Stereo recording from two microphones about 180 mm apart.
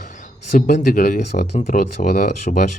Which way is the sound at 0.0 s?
45° left (ahead or behind).